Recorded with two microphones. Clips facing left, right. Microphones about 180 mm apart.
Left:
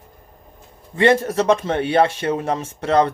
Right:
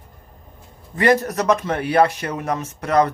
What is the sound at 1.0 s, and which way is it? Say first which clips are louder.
Speech: left 2 dB; 25° left (ahead or behind).